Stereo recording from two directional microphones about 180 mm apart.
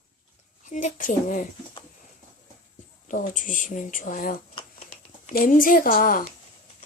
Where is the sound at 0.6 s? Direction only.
45° left (ahead or behind).